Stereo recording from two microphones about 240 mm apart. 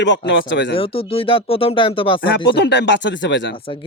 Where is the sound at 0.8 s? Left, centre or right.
Left.